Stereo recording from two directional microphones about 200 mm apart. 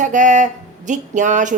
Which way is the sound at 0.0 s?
40° right (ahead or behind).